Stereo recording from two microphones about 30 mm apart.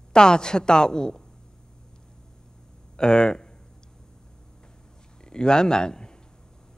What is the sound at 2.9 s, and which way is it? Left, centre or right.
Speech, left.